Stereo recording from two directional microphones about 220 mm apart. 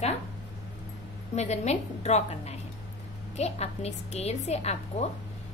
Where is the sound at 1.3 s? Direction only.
30° left (ahead or behind).